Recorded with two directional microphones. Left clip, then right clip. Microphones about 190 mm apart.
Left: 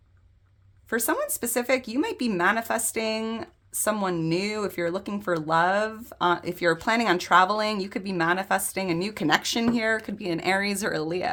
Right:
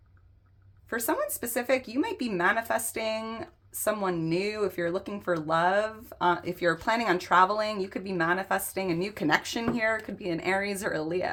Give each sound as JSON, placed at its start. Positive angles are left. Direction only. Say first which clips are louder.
{"t": 0.9, "sound": "speech", "louder": "left 3 dB", "side_deg": 35}